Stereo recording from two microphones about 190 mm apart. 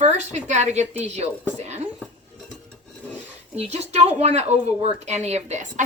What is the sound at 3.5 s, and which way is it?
Speech, 35° right (ahead or behind).